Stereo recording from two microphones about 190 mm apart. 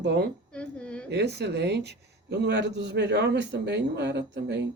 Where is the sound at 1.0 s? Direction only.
60° right (ahead or behind).